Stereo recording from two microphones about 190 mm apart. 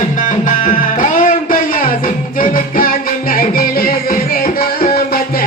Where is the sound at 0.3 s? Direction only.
45° left (ahead or behind).